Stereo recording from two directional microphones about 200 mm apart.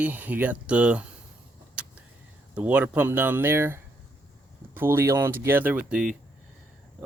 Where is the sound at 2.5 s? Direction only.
5° right (ahead or behind).